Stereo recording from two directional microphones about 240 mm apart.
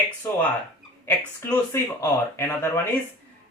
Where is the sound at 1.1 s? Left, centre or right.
Centre.